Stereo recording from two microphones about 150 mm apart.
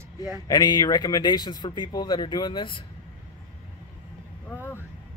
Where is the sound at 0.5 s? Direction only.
25° left (ahead or behind).